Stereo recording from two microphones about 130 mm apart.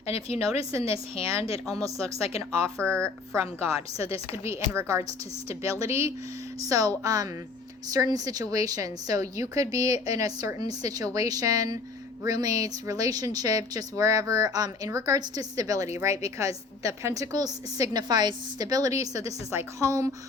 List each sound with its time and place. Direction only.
0.1 s a woman's voice: 50° left (ahead or behind)
1.7 s a woman's voice: 25° right (ahead or behind)